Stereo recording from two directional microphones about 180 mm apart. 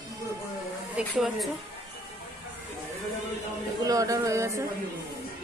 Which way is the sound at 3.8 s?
20° right (ahead or behind).